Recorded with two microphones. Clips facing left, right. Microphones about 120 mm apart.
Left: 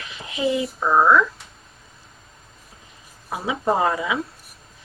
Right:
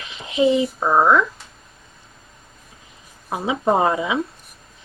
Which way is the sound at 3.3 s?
25° right (ahead or behind).